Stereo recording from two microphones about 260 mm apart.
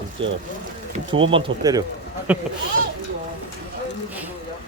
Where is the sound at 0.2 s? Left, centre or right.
Centre.